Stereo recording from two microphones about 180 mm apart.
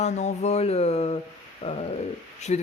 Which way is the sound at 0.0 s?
40° left (ahead or behind).